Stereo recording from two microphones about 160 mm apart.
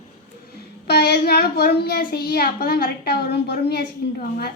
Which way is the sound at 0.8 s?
90° left.